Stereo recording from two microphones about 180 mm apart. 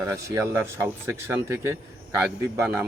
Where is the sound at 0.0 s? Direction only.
15° right (ahead or behind).